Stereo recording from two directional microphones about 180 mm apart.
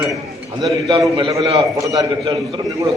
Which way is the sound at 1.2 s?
20° right (ahead or behind).